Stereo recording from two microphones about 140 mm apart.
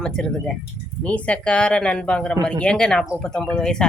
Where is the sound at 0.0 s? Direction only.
5° left (ahead or behind).